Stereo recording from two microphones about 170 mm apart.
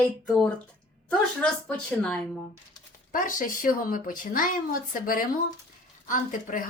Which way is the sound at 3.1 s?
50° left (ahead or behind).